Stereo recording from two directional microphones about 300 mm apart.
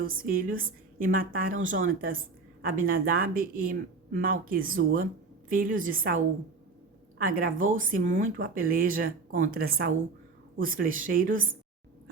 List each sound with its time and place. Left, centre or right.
0.0 s speech: right
7.3 s speech: right